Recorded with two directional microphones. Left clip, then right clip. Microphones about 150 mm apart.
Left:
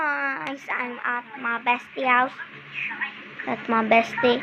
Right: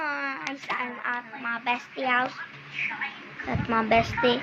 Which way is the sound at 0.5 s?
25° left (ahead or behind).